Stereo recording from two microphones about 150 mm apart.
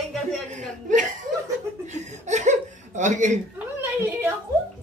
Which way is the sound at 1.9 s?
50° right (ahead or behind).